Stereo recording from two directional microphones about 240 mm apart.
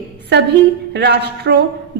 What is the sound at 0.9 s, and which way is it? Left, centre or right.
Speech, right.